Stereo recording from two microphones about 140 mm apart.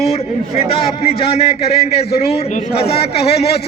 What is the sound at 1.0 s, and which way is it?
Speech, 45° left (ahead or behind).